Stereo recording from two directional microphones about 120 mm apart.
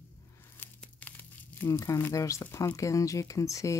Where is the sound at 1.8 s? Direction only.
25° left (ahead or behind).